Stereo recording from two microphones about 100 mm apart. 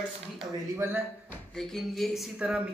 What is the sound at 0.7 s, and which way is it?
Speech, 20° right (ahead or behind).